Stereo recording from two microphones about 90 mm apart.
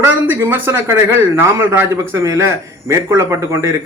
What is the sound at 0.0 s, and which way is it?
A man's voice, 25° right (ahead or behind).